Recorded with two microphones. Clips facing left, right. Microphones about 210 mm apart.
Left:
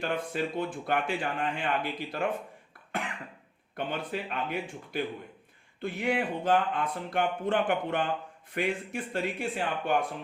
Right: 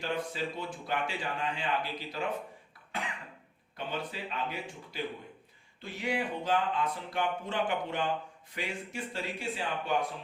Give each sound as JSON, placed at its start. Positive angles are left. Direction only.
{"t": 0.0, "sound": "a man's voice", "side_deg": 55}
{"t": 2.9, "sound": "cough", "side_deg": 55}
{"t": 3.8, "sound": "a man's voice", "side_deg": 55}